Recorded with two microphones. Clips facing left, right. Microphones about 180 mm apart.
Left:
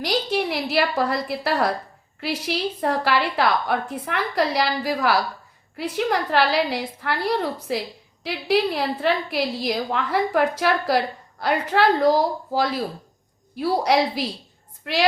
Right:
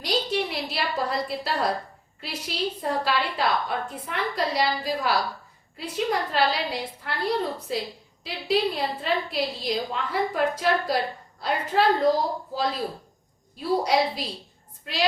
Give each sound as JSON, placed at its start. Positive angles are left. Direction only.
{"t": 0.0, "sound": "a woman's voice", "side_deg": 80}